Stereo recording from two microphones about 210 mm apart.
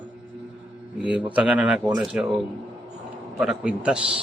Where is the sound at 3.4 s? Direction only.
5° right (ahead or behind).